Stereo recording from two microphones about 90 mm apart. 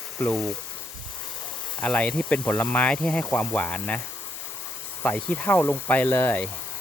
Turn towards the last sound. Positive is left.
turn(degrees=20)  # may be behind; listen again after turning